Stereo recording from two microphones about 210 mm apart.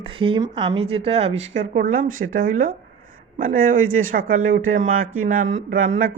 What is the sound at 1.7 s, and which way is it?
Speech, 40° right (ahead or behind).